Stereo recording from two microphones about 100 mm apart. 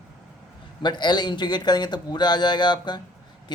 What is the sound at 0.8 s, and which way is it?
Speech, 50° left (ahead or behind).